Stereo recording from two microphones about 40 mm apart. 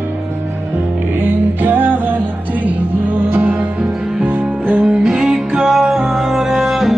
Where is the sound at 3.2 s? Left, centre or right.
Right.